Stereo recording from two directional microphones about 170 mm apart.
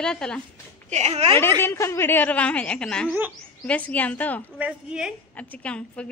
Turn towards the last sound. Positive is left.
turn(degrees=5)  # may be behind; listen again after turning